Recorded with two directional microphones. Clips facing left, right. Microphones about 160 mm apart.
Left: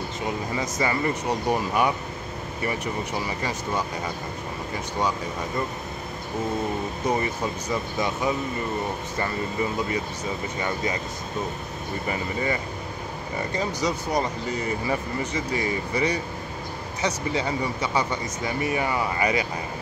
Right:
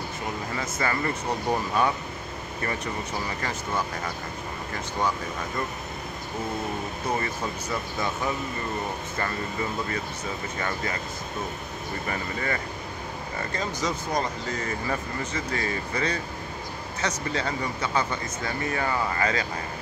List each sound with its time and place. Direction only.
0.6 s speech: 15° left (ahead or behind)
7.7 s speech: 15° left (ahead or behind)
12.1 s speech: 15° left (ahead or behind)